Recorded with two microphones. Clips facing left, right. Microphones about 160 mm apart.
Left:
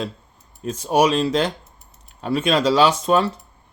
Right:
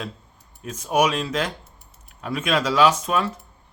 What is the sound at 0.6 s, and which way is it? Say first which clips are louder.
Speech: left 3 dB; 30° left (ahead or behind).